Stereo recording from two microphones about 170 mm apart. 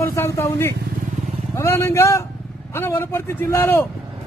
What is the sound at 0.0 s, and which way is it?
A man's voice, 15° left (ahead or behind).